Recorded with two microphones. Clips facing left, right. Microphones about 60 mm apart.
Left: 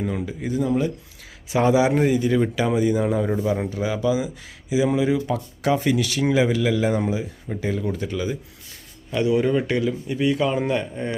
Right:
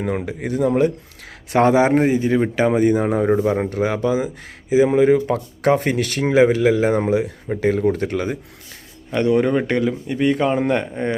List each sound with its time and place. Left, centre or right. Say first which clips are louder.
0.0 s a man's voice: right 3 dB; right
7.1 s a man's voice: right 7 dB; right
10.7 s speech: right 4 dB; right